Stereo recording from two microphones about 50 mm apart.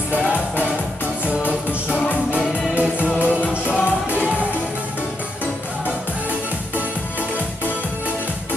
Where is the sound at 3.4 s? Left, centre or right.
Left.